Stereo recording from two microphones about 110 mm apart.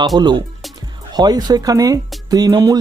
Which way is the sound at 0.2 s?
40° right (ahead or behind).